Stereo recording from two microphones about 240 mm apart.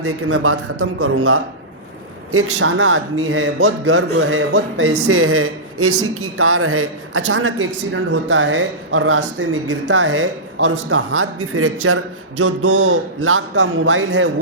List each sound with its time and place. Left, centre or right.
0.0 s a man's voice: right